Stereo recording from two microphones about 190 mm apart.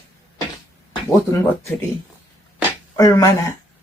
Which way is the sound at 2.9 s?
15° left (ahead or behind).